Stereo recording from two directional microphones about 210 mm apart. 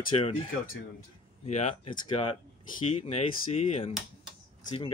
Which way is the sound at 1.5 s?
30° left (ahead or behind).